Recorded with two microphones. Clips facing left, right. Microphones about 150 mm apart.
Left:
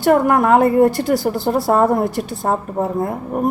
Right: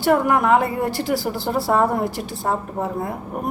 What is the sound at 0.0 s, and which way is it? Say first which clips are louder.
A woman's voice: left 4 dB; 45° left (ahead or behind).